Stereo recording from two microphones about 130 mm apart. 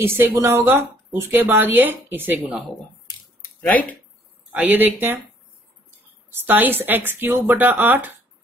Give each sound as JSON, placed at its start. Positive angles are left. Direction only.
{"t": 0.0, "sound": "speech", "side_deg": -15}
{"t": 4.5, "sound": "speech", "side_deg": -10}
{"t": 6.3, "sound": "speech", "side_deg": -15}